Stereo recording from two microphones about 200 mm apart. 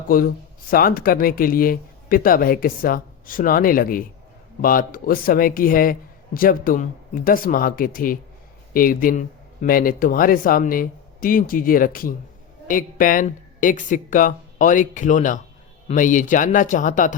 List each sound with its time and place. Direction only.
0.1 s a man's voice: 45° left (ahead or behind)